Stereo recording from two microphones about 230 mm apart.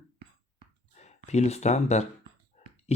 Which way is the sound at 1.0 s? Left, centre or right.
Left.